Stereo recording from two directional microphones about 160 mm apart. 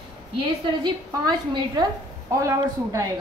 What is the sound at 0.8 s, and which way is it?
A woman's voice, 25° right (ahead or behind).